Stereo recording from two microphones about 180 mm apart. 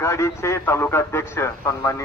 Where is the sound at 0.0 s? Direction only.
15° left (ahead or behind).